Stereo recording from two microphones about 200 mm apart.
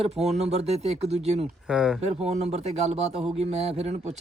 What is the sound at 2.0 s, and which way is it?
Speech, 30° right (ahead or behind).